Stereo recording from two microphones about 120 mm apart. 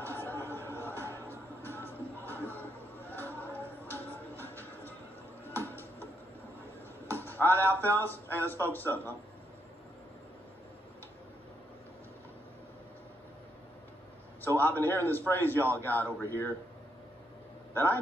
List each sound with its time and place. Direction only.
0.0 s a sound: 15° left (ahead or behind)
0.5 s music: 20° right (ahead or behind)
0.7 s music: 20° left (ahead or behind)
7.1 s a sound: 15° left (ahead or behind)
8.0 s a man's voice: 15° left (ahead or behind)
14.6 s a man's voice: 15° left (ahead or behind)